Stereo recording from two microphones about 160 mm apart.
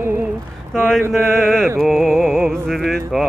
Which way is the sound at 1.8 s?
Centre (ahead or behind).